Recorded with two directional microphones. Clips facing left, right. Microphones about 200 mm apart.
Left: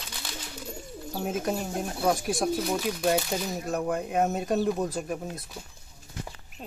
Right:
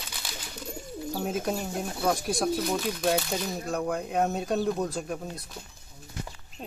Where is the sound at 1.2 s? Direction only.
Centre (ahead or behind).